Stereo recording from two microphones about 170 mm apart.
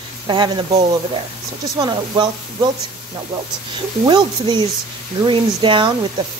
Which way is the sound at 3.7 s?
25° right (ahead or behind).